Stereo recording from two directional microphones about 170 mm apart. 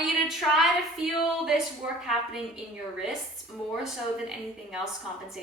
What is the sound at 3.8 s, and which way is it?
Speech, 5° right (ahead or behind).